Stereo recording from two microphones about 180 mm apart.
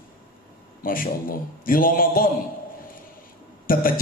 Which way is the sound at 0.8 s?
50° left (ahead or behind).